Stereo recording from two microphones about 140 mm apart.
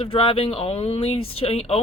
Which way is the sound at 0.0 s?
40° left (ahead or behind).